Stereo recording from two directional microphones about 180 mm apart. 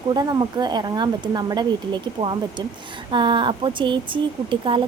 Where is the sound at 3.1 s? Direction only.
25° right (ahead or behind).